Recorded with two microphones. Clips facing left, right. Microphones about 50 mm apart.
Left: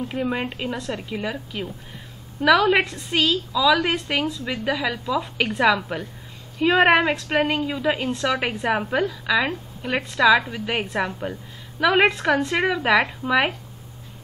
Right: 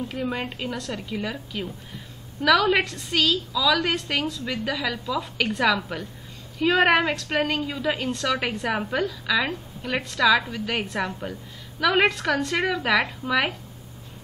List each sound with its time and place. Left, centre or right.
0.2 s a woman's voice: centre